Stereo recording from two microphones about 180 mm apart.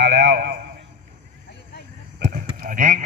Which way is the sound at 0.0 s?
65° right (ahead or behind).